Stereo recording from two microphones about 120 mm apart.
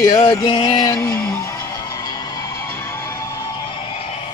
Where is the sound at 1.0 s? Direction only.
20° left (ahead or behind); by 2.5 s 35° left (ahead or behind).